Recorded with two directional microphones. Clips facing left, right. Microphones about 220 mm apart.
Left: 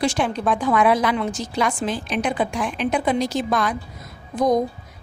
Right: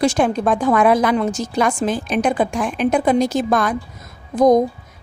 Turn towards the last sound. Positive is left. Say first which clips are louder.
# right 6 dB
turn(degrees=-45)  # may be behind; listen again after turning